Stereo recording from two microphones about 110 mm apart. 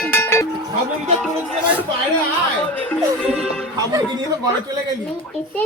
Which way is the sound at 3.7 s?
35° right (ahead or behind).